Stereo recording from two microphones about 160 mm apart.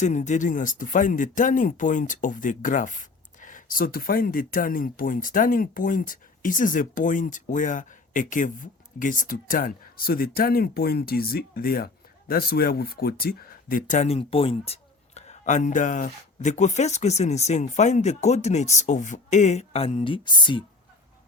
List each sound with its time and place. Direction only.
0.0 s speech: 50° left (ahead or behind); by 20.7 s 30° left (ahead or behind)